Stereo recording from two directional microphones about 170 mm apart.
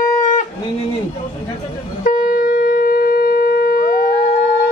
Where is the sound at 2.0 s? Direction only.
55° left (ahead or behind).